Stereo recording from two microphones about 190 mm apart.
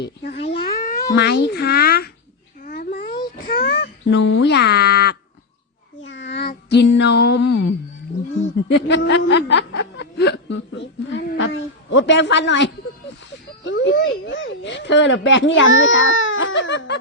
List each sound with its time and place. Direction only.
0.0 s babbling: 60° left (ahead or behind)
0.8 s cat: 50° left (ahead or behind)
1.1 s speech: 60° left (ahead or behind)
2.6 s babbling: 55° left (ahead or behind)
3.4 s a sound: 60° left (ahead or behind)
6.0 s a sound: 75° left (ahead or behind)
6.5 s music: 65° left (ahead or behind)
8.4 s a child's voice: 65° left (ahead or behind)